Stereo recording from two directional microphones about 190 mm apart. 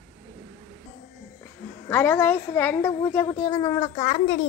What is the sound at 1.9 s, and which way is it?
A woman's voice, 10° left (ahead or behind).